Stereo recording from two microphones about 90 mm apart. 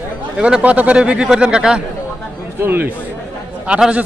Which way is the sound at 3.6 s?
10° right (ahead or behind).